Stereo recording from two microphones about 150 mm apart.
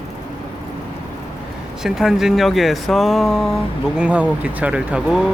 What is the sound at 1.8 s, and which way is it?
Speech, centre (ahead or behind).